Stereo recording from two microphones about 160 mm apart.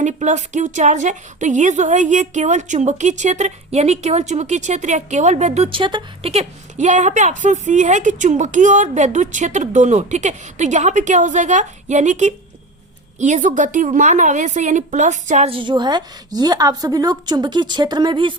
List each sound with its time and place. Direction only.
0.0 s a woman's voice: 45° right (ahead or behind)
15.5 s a woman's voice: 30° right (ahead or behind)